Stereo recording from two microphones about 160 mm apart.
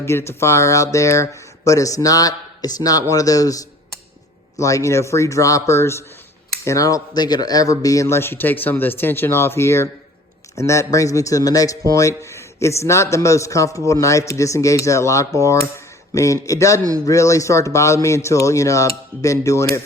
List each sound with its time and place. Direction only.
0.0 s a man's voice: 15° left (ahead or behind)